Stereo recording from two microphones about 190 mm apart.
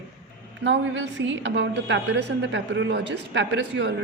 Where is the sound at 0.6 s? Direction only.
70° right (ahead or behind).